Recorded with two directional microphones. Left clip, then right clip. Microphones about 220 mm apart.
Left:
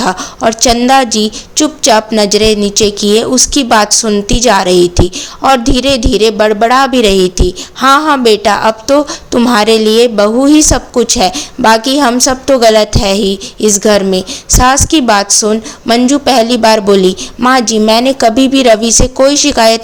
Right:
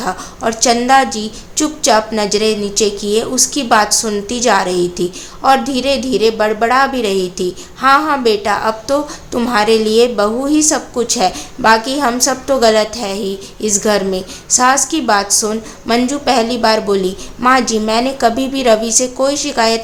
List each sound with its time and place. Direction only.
0.0 s a woman's voice: 35° left (ahead or behind)